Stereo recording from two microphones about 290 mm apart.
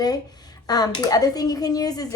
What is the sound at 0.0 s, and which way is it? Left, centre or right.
Speech, centre.